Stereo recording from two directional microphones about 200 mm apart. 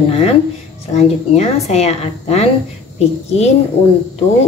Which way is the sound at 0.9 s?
35° left (ahead or behind).